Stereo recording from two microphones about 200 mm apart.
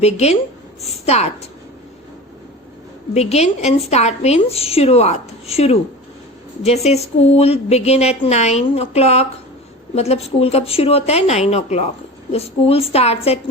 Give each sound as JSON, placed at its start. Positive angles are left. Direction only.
{"t": 0.0, "sound": "speech", "side_deg": 30}
{"t": 3.2, "sound": "speech", "side_deg": 30}